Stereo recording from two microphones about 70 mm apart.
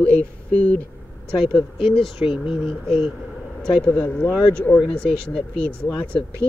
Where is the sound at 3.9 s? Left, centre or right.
Left.